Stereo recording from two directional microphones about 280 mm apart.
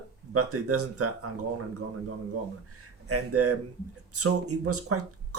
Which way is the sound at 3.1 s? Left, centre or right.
Right.